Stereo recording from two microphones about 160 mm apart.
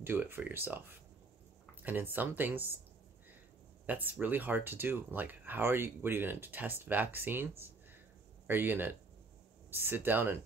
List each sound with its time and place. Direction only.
0.0 s speech: 15° right (ahead or behind)
1.8 s speech: 10° right (ahead or behind)
3.8 s speech: 10° right (ahead or behind)